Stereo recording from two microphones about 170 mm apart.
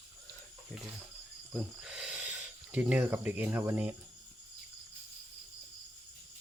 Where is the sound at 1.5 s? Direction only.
5° right (ahead or behind).